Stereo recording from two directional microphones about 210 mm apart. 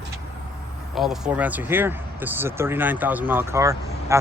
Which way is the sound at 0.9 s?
Centre (ahead or behind).